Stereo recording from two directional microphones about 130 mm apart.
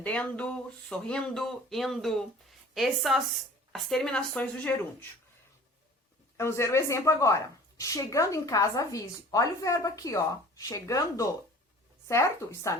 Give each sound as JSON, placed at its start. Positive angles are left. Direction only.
{"t": 0.0, "sound": "speech", "side_deg": 10}
{"t": 6.3, "sound": "a woman's voice", "side_deg": 20}